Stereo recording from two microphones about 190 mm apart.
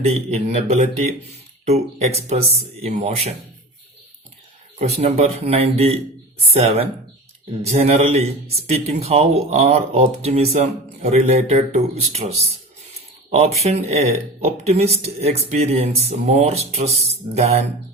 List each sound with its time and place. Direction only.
0.0 s speech: 35° right (ahead or behind)
4.8 s speech: 35° right (ahead or behind)
13.3 s speech: 35° right (ahead or behind)